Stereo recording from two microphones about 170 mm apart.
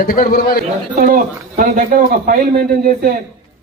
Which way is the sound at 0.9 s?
55° right (ahead or behind).